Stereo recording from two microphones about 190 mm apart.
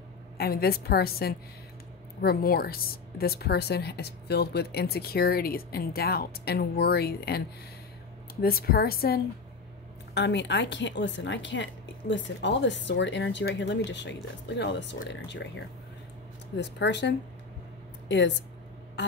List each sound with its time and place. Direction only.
0.4 s a woman's voice: 55° left (ahead or behind)
10.1 s speech: 65° left (ahead or behind)